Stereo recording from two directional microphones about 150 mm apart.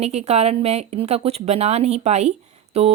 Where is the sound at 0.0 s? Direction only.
45° right (ahead or behind).